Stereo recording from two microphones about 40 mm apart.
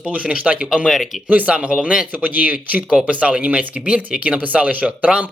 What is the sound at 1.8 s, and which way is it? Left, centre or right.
Speech, right.